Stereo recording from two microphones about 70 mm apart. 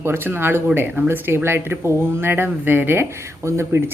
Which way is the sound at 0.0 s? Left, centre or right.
Right.